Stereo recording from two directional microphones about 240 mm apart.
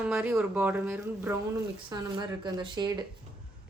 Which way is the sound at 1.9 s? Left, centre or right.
Centre.